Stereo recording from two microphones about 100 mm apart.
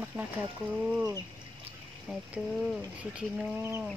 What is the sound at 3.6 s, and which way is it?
Livestock, 25° right (ahead or behind).